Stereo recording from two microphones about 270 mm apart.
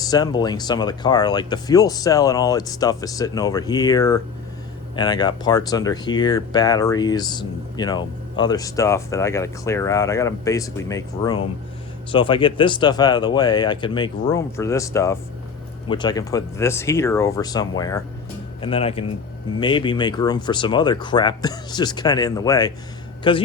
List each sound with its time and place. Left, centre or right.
0.0 s speech: centre